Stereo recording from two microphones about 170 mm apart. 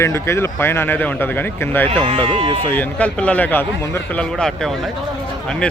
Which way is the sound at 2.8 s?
10° left (ahead or behind).